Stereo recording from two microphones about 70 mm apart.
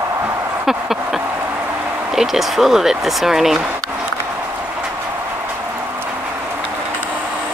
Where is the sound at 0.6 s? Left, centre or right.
Centre.